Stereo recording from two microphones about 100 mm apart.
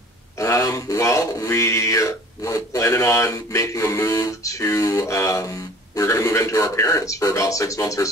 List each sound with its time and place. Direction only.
0.4 s speech: 35° left (ahead or behind)